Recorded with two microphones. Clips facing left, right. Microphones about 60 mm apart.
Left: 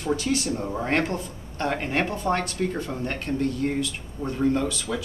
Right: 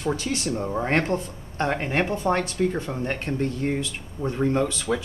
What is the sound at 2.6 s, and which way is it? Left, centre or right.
Speech, centre.